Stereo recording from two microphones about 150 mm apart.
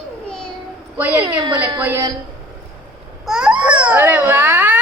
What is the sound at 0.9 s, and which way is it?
A woman's voice, 10° right (ahead or behind).